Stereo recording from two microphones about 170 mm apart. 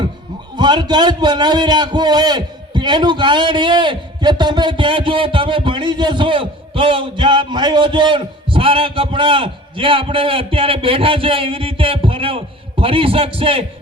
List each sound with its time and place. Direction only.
0.5 s a man's voice: 25° right (ahead or behind)